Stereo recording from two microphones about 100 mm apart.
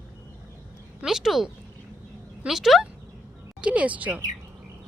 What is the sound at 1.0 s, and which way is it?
Speech, 5° right (ahead or behind).